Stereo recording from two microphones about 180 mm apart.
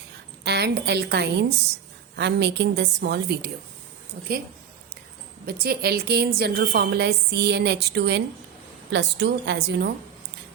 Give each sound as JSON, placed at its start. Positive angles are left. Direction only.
{"t": 0.4, "sound": "a woman's voice", "side_deg": -65}
{"t": 5.5, "sound": "a woman's voice", "side_deg": -60}